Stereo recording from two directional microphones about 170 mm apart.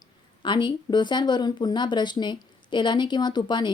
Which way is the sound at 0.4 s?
25° left (ahead or behind).